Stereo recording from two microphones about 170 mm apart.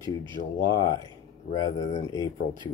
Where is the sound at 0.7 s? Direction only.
25° left (ahead or behind).